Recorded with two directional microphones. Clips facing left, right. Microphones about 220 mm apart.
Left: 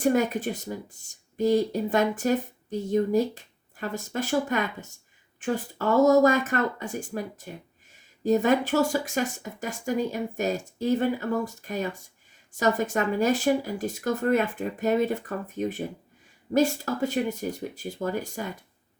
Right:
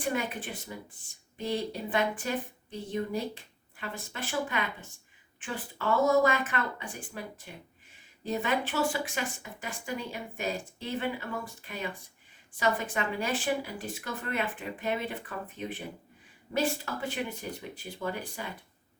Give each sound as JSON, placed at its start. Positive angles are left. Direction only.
{"t": 0.0, "sound": "speech", "side_deg": 45}